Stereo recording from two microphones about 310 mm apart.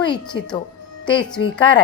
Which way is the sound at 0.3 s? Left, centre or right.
Left.